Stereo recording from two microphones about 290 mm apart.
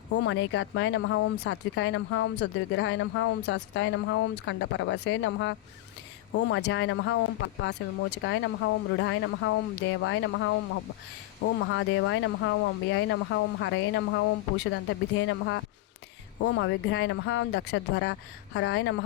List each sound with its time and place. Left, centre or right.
0.1 s speech: left
11.6 s speech: left